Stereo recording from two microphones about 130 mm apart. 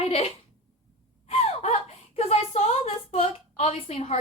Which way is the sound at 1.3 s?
55° left (ahead or behind).